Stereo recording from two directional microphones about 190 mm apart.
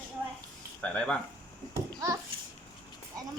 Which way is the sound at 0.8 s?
5° left (ahead or behind).